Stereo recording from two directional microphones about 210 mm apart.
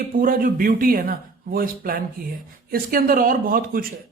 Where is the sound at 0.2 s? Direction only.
40° right (ahead or behind).